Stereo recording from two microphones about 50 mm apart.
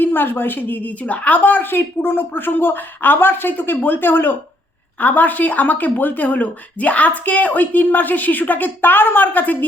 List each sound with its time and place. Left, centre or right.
0.0 s a woman's voice: left